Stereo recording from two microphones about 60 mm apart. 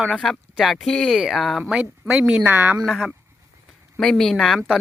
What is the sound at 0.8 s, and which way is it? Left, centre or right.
Speech, centre.